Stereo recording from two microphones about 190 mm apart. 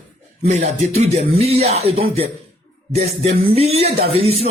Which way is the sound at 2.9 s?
35° right (ahead or behind).